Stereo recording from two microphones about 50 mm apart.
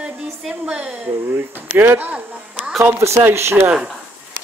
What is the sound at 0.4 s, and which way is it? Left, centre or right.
Speech, centre.